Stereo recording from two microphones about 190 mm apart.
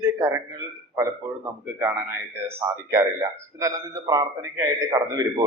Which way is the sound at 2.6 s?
10° right (ahead or behind).